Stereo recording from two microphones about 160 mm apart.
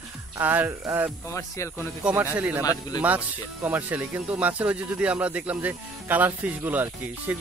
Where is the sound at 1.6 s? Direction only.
20° left (ahead or behind).